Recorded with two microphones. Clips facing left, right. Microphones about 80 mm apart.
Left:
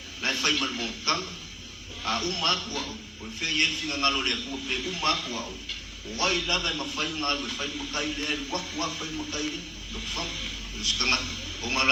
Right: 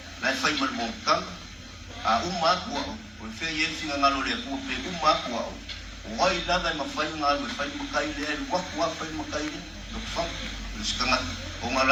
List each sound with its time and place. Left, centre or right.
0.2 s a man's voice: right